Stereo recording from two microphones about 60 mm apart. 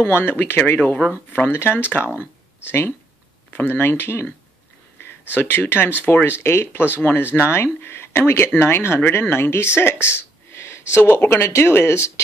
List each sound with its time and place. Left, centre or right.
0.0 s speech: left
10.0 s gasp: left
11.1 s speech: left